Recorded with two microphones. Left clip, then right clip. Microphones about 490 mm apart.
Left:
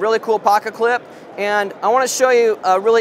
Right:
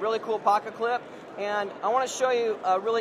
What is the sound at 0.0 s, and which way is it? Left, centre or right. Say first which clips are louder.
Speech: left 10 dB; left.